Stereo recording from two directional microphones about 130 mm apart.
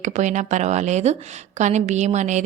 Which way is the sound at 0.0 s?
65° right (ahead or behind).